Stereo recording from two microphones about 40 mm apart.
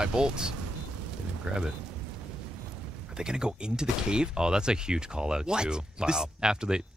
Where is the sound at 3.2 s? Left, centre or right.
Centre.